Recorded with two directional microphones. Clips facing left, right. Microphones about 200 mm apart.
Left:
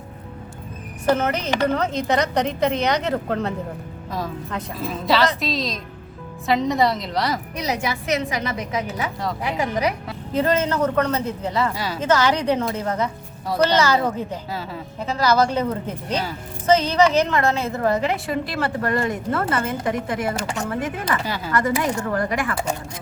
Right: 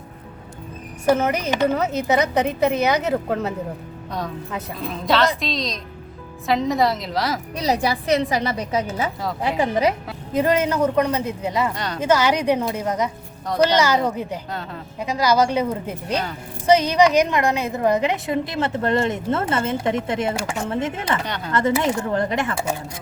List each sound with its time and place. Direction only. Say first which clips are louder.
1.0 s a woman's voice: right 2 dB; 10° right (ahead or behind)
7.5 s a woman's voice: right 4 dB; 35° right (ahead or behind)
10.3 s a woman's voice: right 1 dB; 10° right (ahead or behind)
11.7 s a woman's voice: left 1 dB; 5° left (ahead or behind)
11.9 s a woman's voice: right 1 dB; 10° right (ahead or behind)
15.0 s a woman's voice: right 1 dB; 10° right (ahead or behind)
20.3 s a woman's voice: even; 10° right (ahead or behind)
20.7 s speech: right 2 dB; 25° right (ahead or behind)
21.2 s a woman's voice: left 1 dB; 5° left (ahead or behind)
21.5 s speech: right 2 dB; 25° right (ahead or behind)